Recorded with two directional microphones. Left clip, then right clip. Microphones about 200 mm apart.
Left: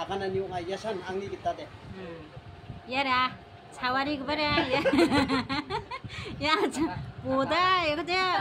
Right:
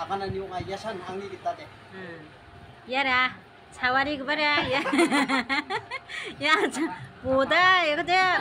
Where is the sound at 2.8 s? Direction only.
20° left (ahead or behind).